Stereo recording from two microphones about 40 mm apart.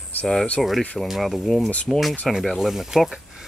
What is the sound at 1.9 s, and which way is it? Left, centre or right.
Speech, centre.